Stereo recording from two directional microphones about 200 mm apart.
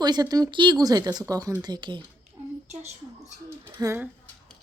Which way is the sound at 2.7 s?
35° right (ahead or behind).